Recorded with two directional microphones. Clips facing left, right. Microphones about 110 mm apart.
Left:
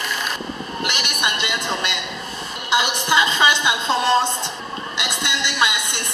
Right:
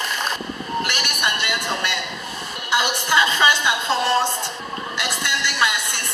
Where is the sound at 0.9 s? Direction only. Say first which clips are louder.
Even; 20° left (ahead or behind).